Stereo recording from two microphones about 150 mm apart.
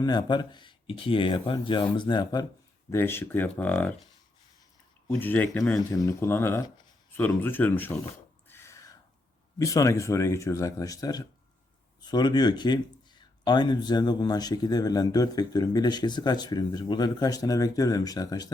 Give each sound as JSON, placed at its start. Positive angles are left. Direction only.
{"t": 0.0, "sound": "speech", "side_deg": 30}
{"t": 2.9, "sound": "speech", "side_deg": 15}
{"t": 5.0, "sound": "speech", "side_deg": 10}
{"t": 5.9, "sound": "speech", "side_deg": 20}
{"t": 8.4, "sound": "a sound", "side_deg": 15}
{"t": 9.6, "sound": "a man's voice", "side_deg": 20}